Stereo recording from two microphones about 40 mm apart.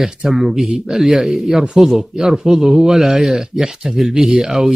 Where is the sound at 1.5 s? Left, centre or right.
Centre.